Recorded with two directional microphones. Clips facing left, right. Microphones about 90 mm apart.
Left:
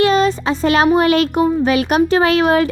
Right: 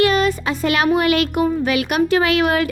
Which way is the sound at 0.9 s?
35° left (ahead or behind).